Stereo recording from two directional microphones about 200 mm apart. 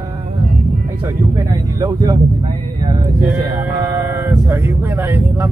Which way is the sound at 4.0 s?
10° right (ahead or behind).